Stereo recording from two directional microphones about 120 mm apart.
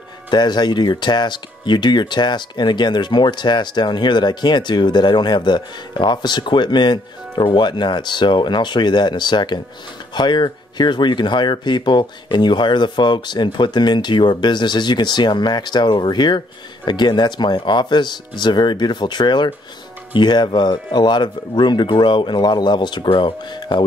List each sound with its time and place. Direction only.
0.3 s speech: 35° left (ahead or behind)